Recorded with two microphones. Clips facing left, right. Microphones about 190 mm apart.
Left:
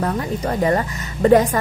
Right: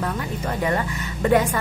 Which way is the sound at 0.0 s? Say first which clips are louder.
Left 5 dB; 35° left (ahead or behind).